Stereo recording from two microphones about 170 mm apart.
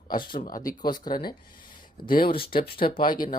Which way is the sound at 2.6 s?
60° left (ahead or behind).